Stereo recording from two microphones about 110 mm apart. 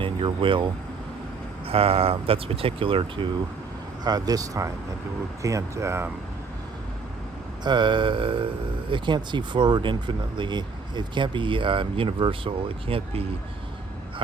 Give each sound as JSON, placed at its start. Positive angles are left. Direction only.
{"t": 0.0, "sound": "speech", "side_deg": -50}
{"t": 1.6, "sound": "speech", "side_deg": -60}
{"t": 4.0, "sound": "speech", "side_deg": -35}
{"t": 7.6, "sound": "speech", "side_deg": -45}